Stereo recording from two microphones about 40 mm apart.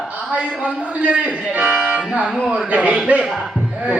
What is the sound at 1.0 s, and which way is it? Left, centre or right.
Speech, right.